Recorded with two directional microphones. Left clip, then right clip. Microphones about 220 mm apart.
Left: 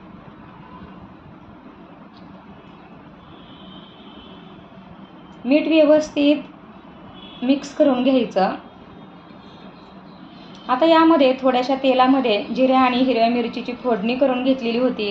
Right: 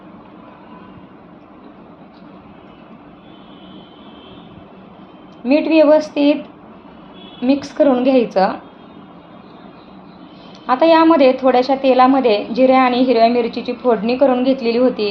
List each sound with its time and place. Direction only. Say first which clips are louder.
5.5 s a woman's voice: right 3 dB; 30° right (ahead or behind)
7.4 s a woman's voice: right 3 dB; 30° right (ahead or behind)
10.7 s a woman's voice: right 3 dB; 30° right (ahead or behind)